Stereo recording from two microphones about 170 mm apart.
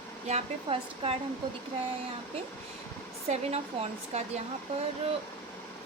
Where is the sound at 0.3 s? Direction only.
35° right (ahead or behind).